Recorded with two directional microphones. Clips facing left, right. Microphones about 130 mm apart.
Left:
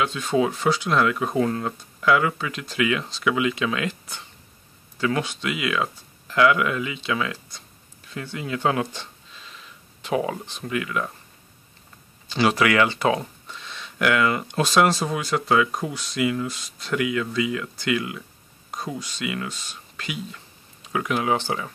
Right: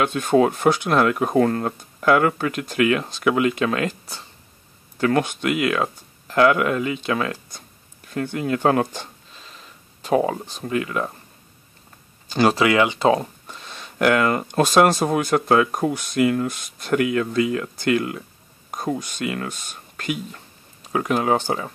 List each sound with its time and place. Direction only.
0.0 s speech: 55° right (ahead or behind)
4.9 s speech: 50° right (ahead or behind)
12.3 s speech: 45° right (ahead or behind)
12.5 s speech: 25° right (ahead or behind)
13.1 s speech: 45° right (ahead or behind)